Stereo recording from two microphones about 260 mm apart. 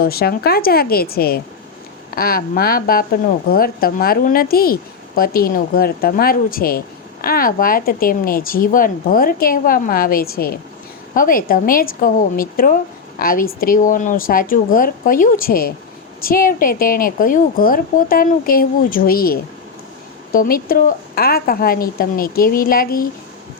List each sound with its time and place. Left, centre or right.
0.0 s a woman's voice: left